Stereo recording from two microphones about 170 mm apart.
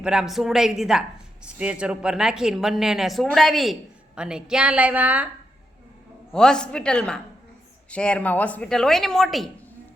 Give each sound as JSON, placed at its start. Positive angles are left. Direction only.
{"t": 0.0, "sound": "a woman's voice", "side_deg": -5}
{"t": 6.3, "sound": "a woman's voice", "side_deg": 5}